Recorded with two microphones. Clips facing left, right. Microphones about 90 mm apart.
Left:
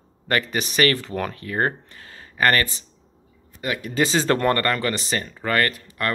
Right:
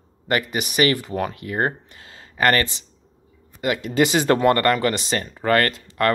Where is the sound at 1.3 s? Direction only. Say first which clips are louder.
Even; 20° right (ahead or behind).